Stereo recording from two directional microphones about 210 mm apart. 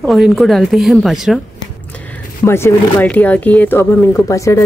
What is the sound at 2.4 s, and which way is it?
Speech, 10° left (ahead or behind).